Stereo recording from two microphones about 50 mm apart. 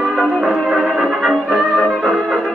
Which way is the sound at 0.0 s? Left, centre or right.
Centre.